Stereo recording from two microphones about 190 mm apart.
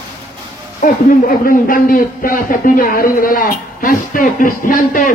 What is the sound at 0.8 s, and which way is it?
A man's voice, 45° left (ahead or behind).